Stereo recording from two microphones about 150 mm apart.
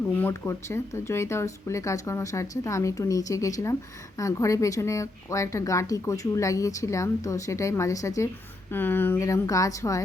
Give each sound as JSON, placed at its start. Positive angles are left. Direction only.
{"t": 0.2, "sound": "a woman's voice", "side_deg": 15}